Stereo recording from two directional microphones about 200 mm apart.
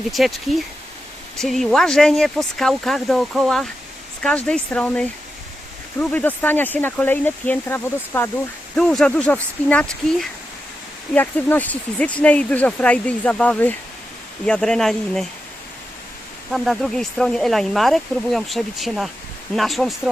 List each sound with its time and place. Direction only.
0.1 s speech: centre (ahead or behind)
16.5 s speech: centre (ahead or behind)